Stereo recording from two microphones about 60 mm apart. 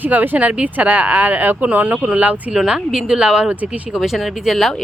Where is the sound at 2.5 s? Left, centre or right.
Centre.